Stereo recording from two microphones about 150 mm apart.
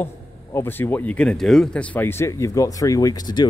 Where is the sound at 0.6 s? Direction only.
15° left (ahead or behind).